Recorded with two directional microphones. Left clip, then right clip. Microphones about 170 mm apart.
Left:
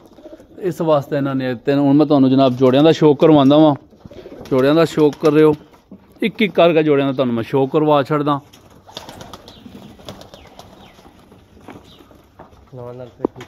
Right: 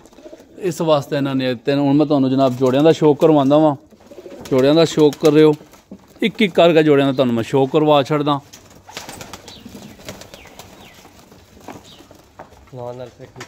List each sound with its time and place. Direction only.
0.6 s a man's voice: 5° right (ahead or behind)
4.5 s speech: 15° right (ahead or behind)